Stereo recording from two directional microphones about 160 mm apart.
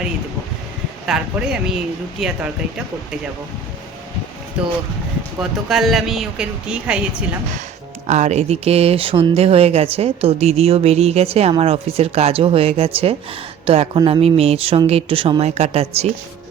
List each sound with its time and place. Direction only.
1.0 s speech: 5° right (ahead or behind)
5.4 s speech: centre (ahead or behind)
8.0 s speech: 45° right (ahead or behind)